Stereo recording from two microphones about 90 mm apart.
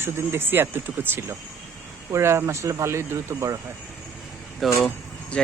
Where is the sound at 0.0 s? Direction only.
25° right (ahead or behind).